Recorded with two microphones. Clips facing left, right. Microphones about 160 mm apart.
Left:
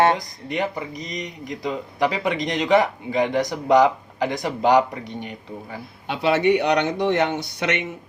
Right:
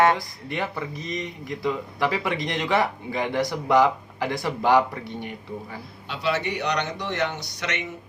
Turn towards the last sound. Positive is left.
turn(degrees=55)  # may be behind; listen again after turning